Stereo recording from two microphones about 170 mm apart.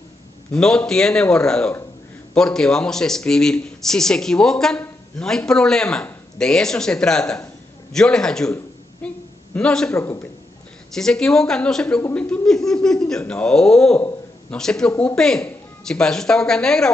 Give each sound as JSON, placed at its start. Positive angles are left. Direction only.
{"t": 0.5, "sound": "speech", "side_deg": 5}
{"t": 9.0, "sound": "a sound", "side_deg": 5}
{"t": 9.9, "sound": "speech", "side_deg": 15}
{"t": 11.0, "sound": "speech", "side_deg": 5}